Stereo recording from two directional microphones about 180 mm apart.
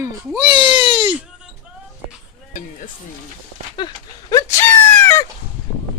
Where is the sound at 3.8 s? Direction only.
20° left (ahead or behind).